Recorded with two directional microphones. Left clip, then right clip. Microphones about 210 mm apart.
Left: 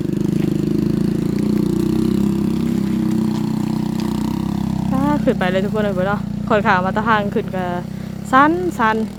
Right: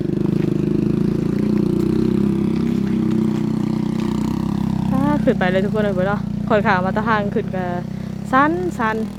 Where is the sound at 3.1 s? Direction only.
40° left (ahead or behind); by 7.8 s 15° left (ahead or behind).